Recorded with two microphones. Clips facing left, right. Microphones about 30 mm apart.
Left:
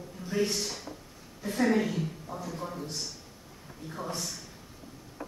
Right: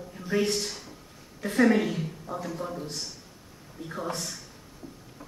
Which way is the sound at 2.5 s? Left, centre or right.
Centre.